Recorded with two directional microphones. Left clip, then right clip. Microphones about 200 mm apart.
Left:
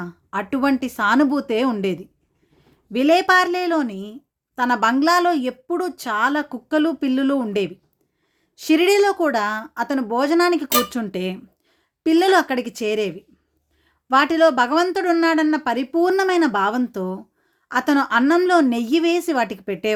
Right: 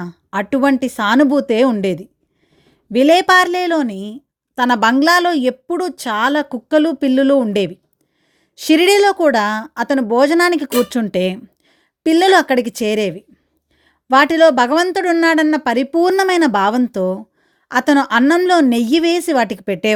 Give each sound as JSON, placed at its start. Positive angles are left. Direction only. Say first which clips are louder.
{"t": 0.0, "sound": "speech", "louder": "right 5 dB", "side_deg": -35}